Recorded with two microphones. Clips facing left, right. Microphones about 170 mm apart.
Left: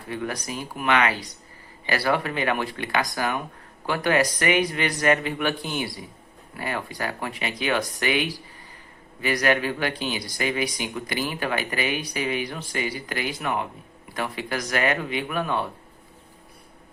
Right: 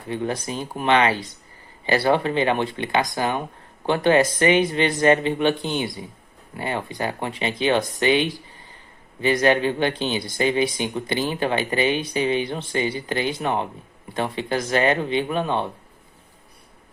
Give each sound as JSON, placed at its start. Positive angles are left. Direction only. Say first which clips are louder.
{"t": 0.1, "sound": "speech", "louder": "right 4 dB", "side_deg": -25}